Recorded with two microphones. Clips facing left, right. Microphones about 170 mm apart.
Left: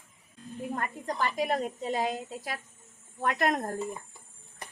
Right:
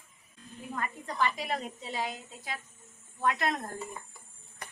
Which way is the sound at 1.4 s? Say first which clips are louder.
Left 6 dB; 45° left (ahead or behind).